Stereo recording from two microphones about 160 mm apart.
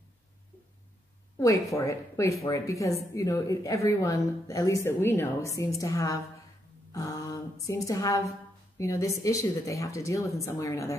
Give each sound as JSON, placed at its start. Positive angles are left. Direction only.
{"t": 1.4, "sound": "speech", "side_deg": 20}
{"t": 6.9, "sound": "a sound", "side_deg": 20}
{"t": 7.6, "sound": "speech", "side_deg": 20}